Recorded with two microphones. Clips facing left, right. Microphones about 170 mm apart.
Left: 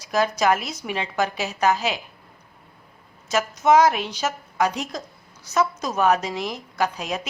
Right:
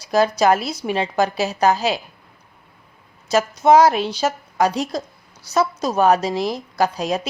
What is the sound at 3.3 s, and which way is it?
A woman's voice, 30° right (ahead or behind).